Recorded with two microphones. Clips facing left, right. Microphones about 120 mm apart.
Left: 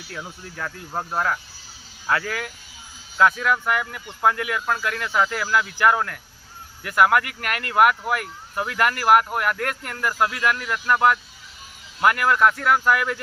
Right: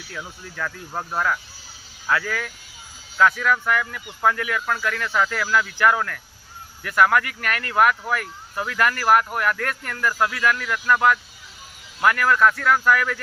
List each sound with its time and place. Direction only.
0.1 s speech: 25° left (ahead or behind)